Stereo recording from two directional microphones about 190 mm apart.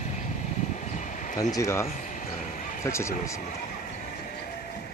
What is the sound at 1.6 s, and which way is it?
Speech, 15° left (ahead or behind).